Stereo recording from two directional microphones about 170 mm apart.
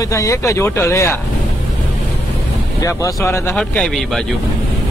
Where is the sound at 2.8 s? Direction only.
15° left (ahead or behind).